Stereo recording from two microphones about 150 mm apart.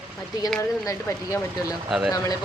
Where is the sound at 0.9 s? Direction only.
20° left (ahead or behind).